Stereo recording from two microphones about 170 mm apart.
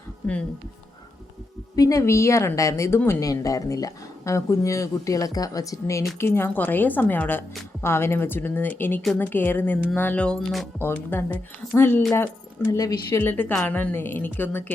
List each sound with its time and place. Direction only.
0.2 s a woman's voice: 10° left (ahead or behind)
1.7 s a woman's voice: 20° left (ahead or behind); by 10.7 s 5° left (ahead or behind)
10.8 s a woman's voice: 15° left (ahead or behind)